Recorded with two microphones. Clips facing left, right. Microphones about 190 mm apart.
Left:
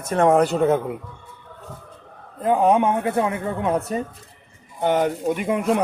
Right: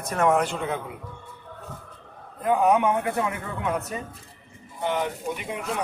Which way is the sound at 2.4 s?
30° left (ahead or behind).